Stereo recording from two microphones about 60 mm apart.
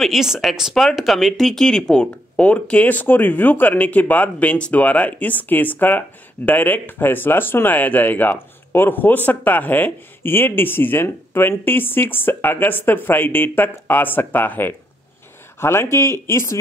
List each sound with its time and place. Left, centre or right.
0.0 s speech: centre; by 14.7 s left
15.6 s speech: left